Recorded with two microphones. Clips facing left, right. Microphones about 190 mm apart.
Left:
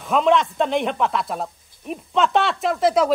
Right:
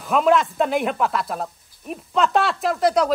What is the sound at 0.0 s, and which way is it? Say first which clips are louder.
Speech: even; centre (ahead or behind).